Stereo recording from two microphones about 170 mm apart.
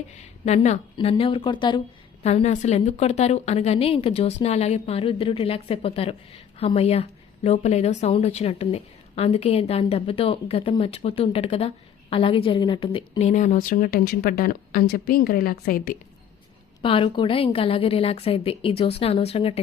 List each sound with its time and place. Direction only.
0.2 s a woman's voice: 40° left (ahead or behind)
2.2 s a woman's voice: 40° left (ahead or behind); by 16.0 s 60° left (ahead or behind)
16.8 s a woman's voice: 30° left (ahead or behind)